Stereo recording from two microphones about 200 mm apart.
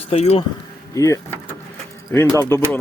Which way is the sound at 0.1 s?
30° left (ahead or behind).